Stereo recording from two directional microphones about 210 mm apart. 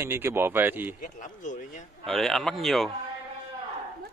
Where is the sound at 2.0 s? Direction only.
Centre (ahead or behind).